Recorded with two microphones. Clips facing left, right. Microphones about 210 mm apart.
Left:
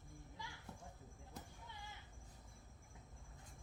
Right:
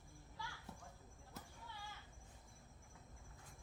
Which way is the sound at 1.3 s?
20° left (ahead or behind).